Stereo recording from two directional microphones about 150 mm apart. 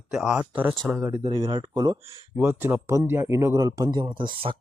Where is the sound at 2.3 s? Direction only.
10° right (ahead or behind).